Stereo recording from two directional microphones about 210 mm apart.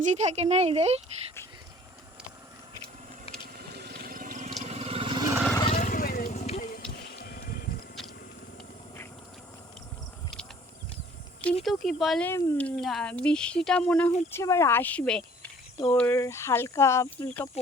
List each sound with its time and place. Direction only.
0.0 s speech: 35° right (ahead or behind)
3.4 s vehicle: 50° right (ahead or behind); by 5.4 s 20° right (ahead or behind)
5.7 s vehicle: 40° left (ahead or behind)
11.6 s speech: centre (ahead or behind)